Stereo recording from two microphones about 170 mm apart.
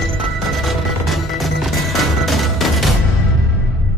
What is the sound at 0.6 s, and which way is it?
Music, centre (ahead or behind).